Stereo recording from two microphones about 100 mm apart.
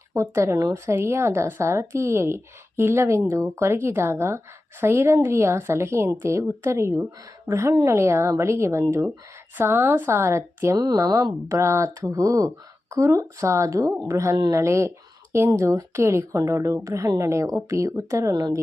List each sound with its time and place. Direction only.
0.1 s speech: 30° right (ahead or behind)
10.8 s speech: 40° right (ahead or behind)